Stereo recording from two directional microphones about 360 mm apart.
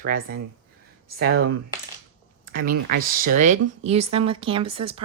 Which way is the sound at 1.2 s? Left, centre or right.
Right.